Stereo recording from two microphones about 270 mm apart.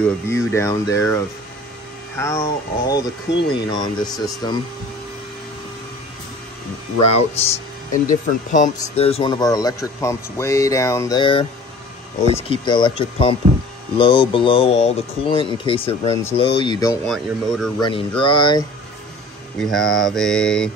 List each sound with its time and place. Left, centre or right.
0.0 s speech: centre
3.3 s speech: left
3.6 s speech: centre
7.0 s speech: left
12.4 s speech: centre
17.0 s mantra: centre
17.7 s speech: centre
19.6 s mantra: centre